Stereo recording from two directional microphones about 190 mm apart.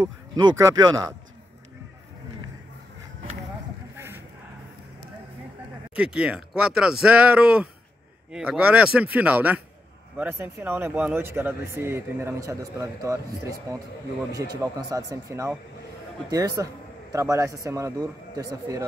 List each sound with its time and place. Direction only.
0.0 s speech: 20° right (ahead or behind)
3.9 s cattle: 10° right (ahead or behind)
5.9 s speech: 5° right (ahead or behind)